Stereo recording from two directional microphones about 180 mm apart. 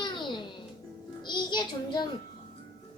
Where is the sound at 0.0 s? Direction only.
25° left (ahead or behind).